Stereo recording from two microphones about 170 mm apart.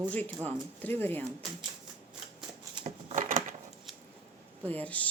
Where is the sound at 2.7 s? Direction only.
40° right (ahead or behind).